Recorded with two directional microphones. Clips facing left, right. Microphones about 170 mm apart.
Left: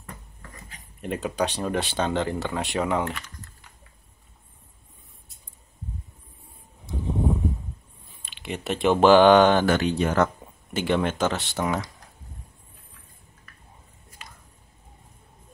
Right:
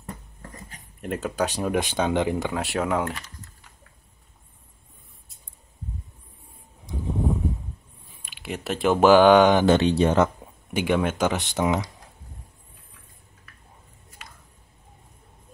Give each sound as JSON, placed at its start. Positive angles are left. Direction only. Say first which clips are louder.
{"t": 1.0, "sound": "speech", "louder": "even", "side_deg": 0}
{"t": 2.6, "sound": "speech", "louder": "left 2 dB", "side_deg": 0}
{"t": 8.1, "sound": "speech", "louder": "even", "side_deg": -10}
{"t": 9.7, "sound": "speech", "louder": "right 4 dB", "side_deg": -30}